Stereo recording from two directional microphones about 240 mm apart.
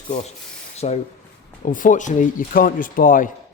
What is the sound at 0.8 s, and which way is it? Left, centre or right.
A man's voice, left.